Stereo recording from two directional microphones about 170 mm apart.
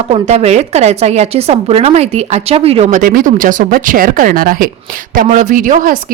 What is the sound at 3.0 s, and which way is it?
Speech, 55° right (ahead or behind).